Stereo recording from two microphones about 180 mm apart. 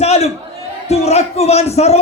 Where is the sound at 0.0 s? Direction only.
35° left (ahead or behind).